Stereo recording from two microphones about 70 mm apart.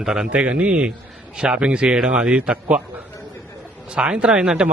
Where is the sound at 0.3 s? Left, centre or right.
Centre.